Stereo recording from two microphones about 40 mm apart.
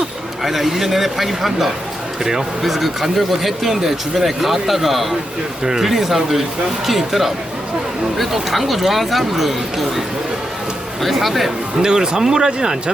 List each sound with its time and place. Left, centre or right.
0.4 s speech: centre
11.0 s speech: centre
11.8 s speech: centre